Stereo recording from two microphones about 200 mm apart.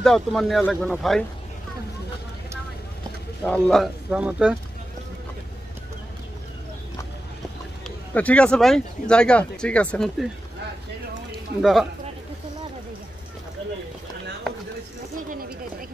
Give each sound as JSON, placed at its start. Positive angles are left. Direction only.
{"t": 0.0, "sound": "speech", "side_deg": 0}
{"t": 3.4, "sound": "speech", "side_deg": 5}
{"t": 8.1, "sound": "speech", "side_deg": 5}
{"t": 11.6, "sound": "speech", "side_deg": 0}